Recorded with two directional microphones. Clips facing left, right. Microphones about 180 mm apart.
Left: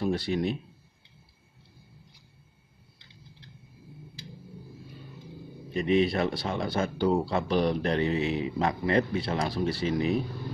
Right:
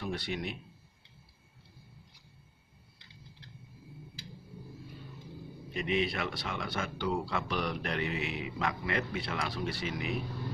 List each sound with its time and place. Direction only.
0.0 s speech: 35° left (ahead or behind)
5.7 s speech: 35° left (ahead or behind)